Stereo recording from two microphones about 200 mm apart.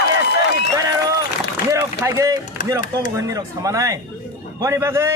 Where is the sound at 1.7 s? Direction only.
15° right (ahead or behind).